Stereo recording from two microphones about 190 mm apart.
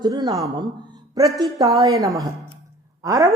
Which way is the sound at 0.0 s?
20° right (ahead or behind).